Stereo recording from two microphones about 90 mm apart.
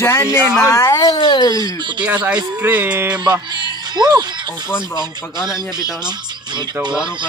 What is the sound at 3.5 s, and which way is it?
Music, 50° right (ahead or behind).